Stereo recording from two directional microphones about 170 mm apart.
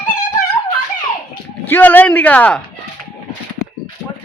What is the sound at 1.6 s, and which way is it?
Speech, 10° left (ahead or behind).